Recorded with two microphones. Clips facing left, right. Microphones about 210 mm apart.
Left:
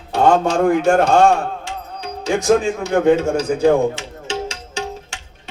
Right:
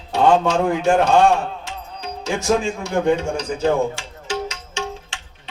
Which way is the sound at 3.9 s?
25° left (ahead or behind).